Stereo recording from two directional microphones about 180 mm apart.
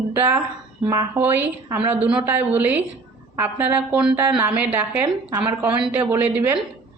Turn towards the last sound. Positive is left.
turn(degrees=-10)  # may be behind; listen again after turning